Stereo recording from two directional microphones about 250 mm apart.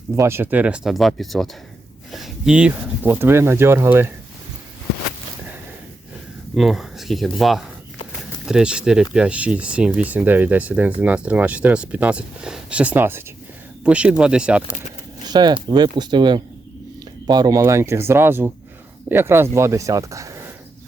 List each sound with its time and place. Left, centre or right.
0.2 s speech: centre
6.6 s speech: centre
15.3 s speech: centre